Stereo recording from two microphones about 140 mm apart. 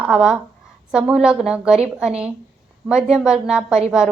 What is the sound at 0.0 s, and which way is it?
A woman's voice, 5° right (ahead or behind).